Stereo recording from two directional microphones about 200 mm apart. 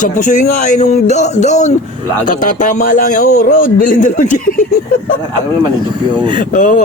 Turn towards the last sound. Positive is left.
turn(degrees=40)  # may be behind; listen again after turning